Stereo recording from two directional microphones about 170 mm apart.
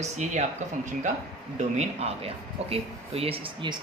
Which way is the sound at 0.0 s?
40° right (ahead or behind).